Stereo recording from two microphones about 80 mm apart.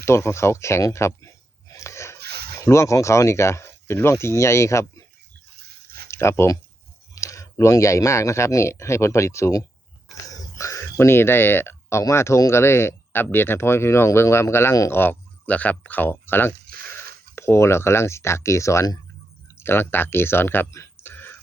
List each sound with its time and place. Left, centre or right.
0.0 s a sound: left
2.6 s speech: left
6.1 s speech: left